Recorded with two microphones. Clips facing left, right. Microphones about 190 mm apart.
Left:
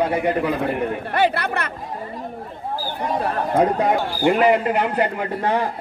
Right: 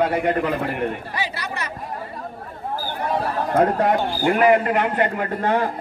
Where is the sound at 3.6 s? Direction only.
10° left (ahead or behind).